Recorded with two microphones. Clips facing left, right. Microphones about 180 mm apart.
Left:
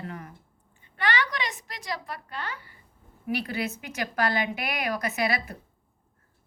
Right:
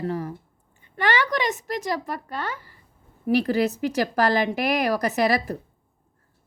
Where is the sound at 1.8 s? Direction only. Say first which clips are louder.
Right 7 dB; 45° right (ahead or behind).